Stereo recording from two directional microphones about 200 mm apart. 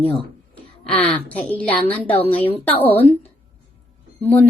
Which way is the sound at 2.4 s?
30° left (ahead or behind).